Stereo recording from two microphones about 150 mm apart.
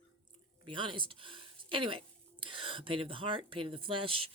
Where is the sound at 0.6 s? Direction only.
35° right (ahead or behind).